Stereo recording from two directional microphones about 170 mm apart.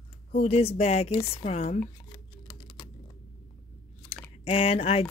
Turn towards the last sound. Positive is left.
turn(degrees=35)  # may be behind; listen again after turning